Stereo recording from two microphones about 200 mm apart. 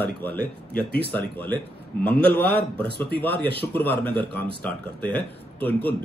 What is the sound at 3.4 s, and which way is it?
Speech, 25° right (ahead or behind).